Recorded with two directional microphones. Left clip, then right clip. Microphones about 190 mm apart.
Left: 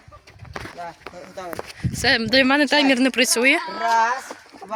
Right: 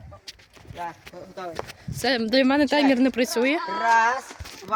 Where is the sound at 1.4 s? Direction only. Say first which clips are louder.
Left 1 dB; 50° left (ahead or behind).